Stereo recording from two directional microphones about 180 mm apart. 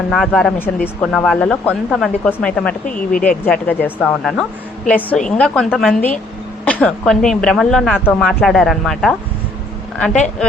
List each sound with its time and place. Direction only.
0.1 s speech: centre (ahead or behind)